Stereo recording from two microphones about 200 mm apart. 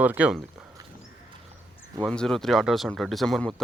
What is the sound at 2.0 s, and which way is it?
Speech, 5° left (ahead or behind).